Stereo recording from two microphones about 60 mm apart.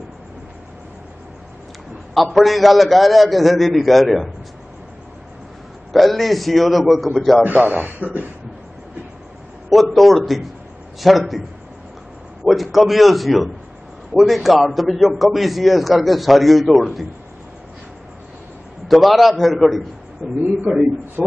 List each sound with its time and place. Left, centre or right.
2.1 s a man's voice: centre
5.9 s a man's voice: centre
7.4 s speech: right
9.7 s a man's voice: centre
12.4 s a man's voice: centre
18.9 s a man's voice: centre